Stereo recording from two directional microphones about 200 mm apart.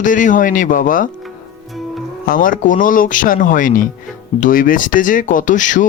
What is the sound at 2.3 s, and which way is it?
Speech, 45° left (ahead or behind).